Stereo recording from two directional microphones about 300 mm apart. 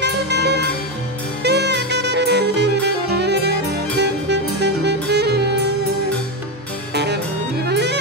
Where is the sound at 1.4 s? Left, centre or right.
Right.